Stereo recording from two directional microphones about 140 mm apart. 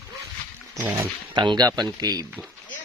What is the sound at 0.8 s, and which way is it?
Speech, 15° right (ahead or behind).